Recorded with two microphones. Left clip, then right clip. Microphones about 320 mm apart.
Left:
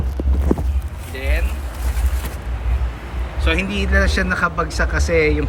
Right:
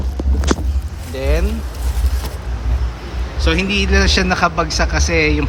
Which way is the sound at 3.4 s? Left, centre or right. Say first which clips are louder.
Right 4 dB; centre.